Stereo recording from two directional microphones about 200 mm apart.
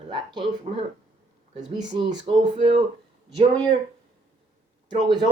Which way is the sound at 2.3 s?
30° right (ahead or behind).